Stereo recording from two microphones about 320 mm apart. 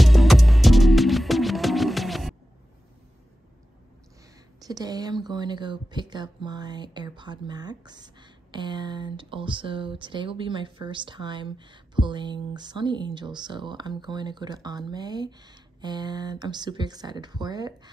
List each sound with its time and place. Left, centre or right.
0.0 s music: centre
4.6 s speech: centre